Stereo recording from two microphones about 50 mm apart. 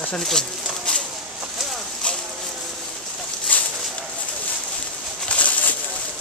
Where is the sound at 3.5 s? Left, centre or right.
Left.